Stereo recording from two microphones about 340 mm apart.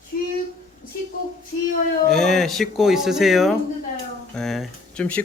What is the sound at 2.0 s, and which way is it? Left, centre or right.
Speech, centre.